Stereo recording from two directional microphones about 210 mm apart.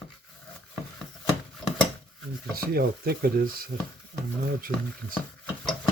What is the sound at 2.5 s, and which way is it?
Speech, 45° right (ahead or behind).